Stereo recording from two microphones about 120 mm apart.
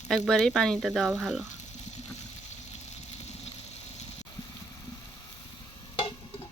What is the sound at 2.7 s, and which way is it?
Vehicle, 65° left (ahead or behind).